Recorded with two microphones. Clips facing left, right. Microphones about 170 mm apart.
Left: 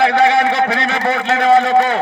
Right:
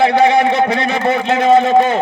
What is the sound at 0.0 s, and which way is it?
A man's voice, 20° right (ahead or behind).